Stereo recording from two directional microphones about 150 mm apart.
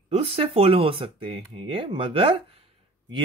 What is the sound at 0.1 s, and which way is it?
Speech, 40° right (ahead or behind).